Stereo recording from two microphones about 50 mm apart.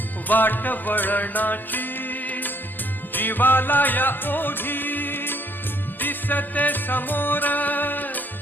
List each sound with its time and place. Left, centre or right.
0.3 s music: left